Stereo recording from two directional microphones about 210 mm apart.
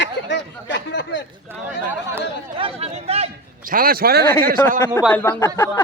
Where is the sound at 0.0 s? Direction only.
60° left (ahead or behind).